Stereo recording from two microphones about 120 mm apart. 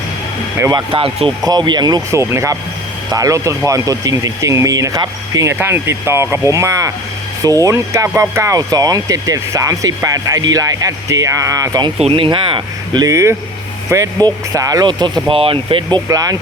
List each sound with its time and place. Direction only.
0.9 s speech: 50° right (ahead or behind)
1.5 s speech: 35° right (ahead or behind)
2.0 s speech: 25° right (ahead or behind)
11.9 s speech: 55° right (ahead or behind); by 15.4 s 35° right (ahead or behind)
15.4 s speech: 50° right (ahead or behind)